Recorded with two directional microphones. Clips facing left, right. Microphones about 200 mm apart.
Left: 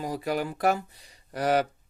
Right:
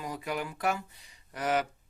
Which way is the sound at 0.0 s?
35° left (ahead or behind).